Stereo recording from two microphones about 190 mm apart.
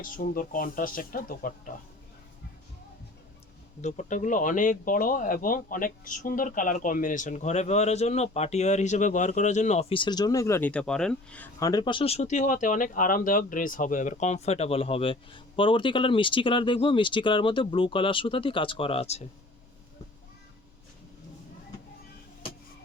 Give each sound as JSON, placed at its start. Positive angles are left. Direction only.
{"t": 0.0, "sound": "speech", "side_deg": 45}
{"t": 3.8, "sound": "speech", "side_deg": 40}
{"t": 11.6, "sound": "speech", "side_deg": 20}